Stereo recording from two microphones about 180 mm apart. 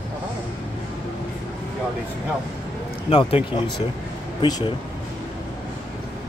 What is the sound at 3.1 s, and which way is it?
Speech, 30° left (ahead or behind).